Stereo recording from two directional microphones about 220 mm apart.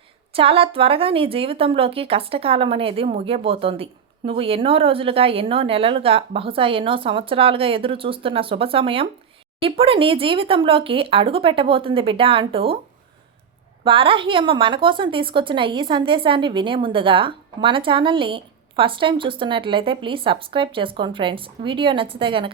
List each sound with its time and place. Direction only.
0.3 s a woman's voice: 25° right (ahead or behind)
13.8 s a woman's voice: 25° right (ahead or behind)